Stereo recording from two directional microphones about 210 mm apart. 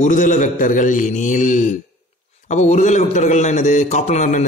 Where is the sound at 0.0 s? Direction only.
35° left (ahead or behind).